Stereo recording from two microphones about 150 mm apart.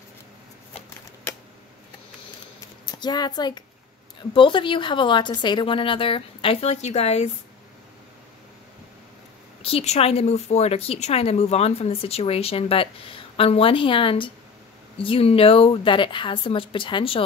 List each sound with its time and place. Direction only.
2.8 s a child's voice: 30° left (ahead or behind); by 7.2 s 45° left (ahead or behind)
9.6 s a woman's voice: 40° left (ahead or behind)